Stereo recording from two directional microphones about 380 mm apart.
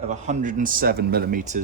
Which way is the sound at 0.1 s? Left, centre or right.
Centre.